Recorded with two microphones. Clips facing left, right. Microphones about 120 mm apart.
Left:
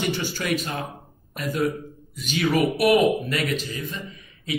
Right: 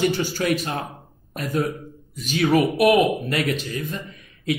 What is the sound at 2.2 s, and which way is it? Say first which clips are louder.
Speech: right 3 dB; 45° right (ahead or behind).